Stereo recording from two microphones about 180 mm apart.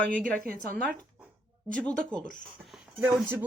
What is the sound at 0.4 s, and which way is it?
Speech, 50° right (ahead or behind).